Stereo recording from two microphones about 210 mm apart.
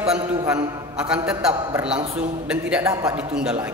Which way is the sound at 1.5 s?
20° right (ahead or behind).